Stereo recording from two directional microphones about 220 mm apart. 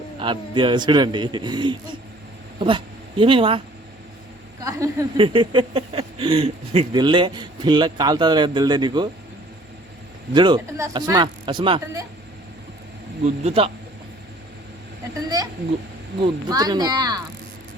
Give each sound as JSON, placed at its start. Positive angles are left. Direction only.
{"t": 0.2, "sound": "speech", "side_deg": -20}
{"t": 4.6, "sound": "speech", "side_deg": -15}
{"t": 10.3, "sound": "speech", "side_deg": -20}
{"t": 13.2, "sound": "speech", "side_deg": -25}
{"t": 16.2, "sound": "speech", "side_deg": -20}